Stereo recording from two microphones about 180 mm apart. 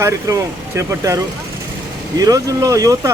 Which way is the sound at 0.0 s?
15° right (ahead or behind).